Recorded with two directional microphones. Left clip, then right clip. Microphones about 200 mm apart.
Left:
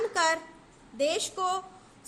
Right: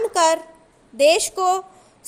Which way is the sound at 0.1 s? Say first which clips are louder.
Right 10 dB; 30° right (ahead or behind).